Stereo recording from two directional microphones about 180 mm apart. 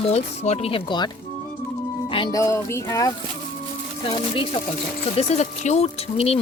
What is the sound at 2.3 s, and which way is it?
Music, 15° left (ahead or behind).